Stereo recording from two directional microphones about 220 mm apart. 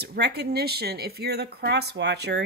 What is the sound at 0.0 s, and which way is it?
Speech, 45° right (ahead or behind).